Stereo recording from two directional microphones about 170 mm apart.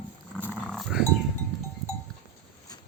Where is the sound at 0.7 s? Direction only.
Centre (ahead or behind).